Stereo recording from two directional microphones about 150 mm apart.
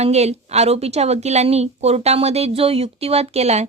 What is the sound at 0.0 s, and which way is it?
Speech, 45° right (ahead or behind).